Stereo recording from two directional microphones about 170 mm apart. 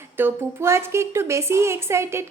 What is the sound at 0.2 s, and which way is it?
A woman's voice, 15° right (ahead or behind).